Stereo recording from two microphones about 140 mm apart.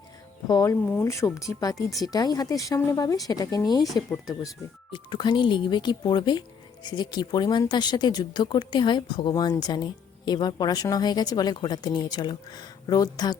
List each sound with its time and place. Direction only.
0.4 s a woman's voice: 25° left (ahead or behind)
4.9 s speech: 35° left (ahead or behind)